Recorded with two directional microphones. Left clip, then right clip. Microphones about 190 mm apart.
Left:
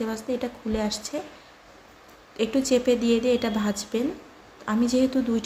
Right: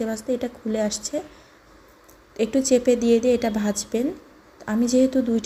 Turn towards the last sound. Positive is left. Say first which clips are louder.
# right 4 dB
turn(degrees=-20)  # may be behind; listen again after turning